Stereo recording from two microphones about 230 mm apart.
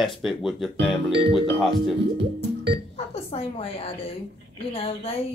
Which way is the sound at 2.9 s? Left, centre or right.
Left.